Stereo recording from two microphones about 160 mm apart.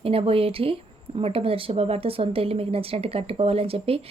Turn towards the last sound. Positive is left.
turn(degrees=-35)  # may be behind; listen again after turning